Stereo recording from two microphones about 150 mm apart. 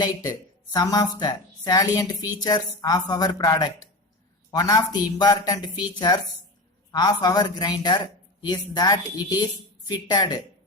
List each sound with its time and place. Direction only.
0.0 s speech: 25° left (ahead or behind)